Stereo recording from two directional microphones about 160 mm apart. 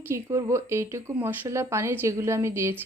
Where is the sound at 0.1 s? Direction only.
20° right (ahead or behind).